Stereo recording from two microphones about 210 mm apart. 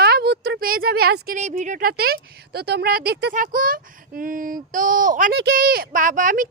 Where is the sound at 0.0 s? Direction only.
50° right (ahead or behind).